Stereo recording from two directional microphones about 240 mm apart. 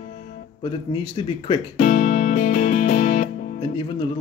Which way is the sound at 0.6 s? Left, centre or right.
Left.